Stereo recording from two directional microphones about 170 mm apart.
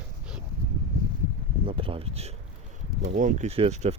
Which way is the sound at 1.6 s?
35° right (ahead or behind).